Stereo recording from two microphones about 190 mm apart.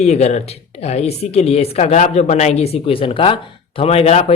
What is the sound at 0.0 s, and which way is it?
Speech, 35° left (ahead or behind).